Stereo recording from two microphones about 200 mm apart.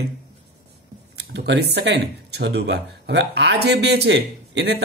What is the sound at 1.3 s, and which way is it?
Speech, 55° right (ahead or behind).